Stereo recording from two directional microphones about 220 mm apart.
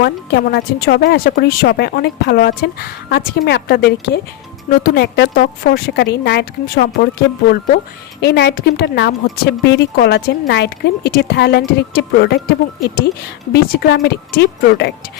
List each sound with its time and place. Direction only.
0.0 s a woman's voice: 50° left (ahead or behind)
8.2 s a woman's voice: 50° left (ahead or behind)